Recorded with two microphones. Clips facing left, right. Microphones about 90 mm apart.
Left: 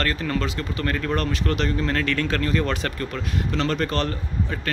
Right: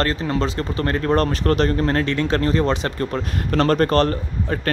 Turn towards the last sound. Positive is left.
turn(degrees=-45)  # may be behind; listen again after turning